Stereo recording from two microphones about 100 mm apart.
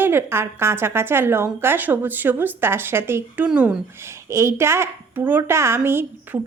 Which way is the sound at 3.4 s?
10° right (ahead or behind).